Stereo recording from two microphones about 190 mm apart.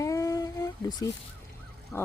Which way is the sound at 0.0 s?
15° left (ahead or behind).